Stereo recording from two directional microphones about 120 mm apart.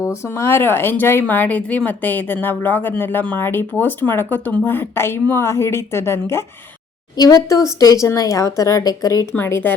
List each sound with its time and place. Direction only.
0.0 s speech: 25° left (ahead or behind)
9.3 s speech: 20° left (ahead or behind)